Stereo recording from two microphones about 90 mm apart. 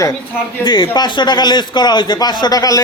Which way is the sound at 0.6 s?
60° left (ahead or behind).